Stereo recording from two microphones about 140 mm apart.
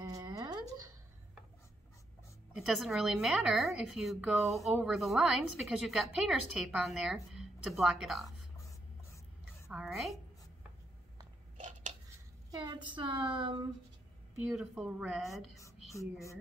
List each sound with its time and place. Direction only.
0.0 s a sound: 25° right (ahead or behind)
2.5 s a woman's voice: centre (ahead or behind)
9.7 s a woman's voice: 5° right (ahead or behind)
11.5 s a sound: 60° right (ahead or behind)
12.4 s a woman's voice: 30° right (ahead or behind)
14.4 s a woman's voice: 5° right (ahead or behind)
15.3 s a woman's voice: 20° left (ahead or behind)